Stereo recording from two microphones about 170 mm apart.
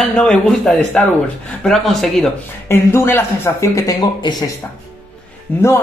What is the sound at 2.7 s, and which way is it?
A man's voice, 15° left (ahead or behind).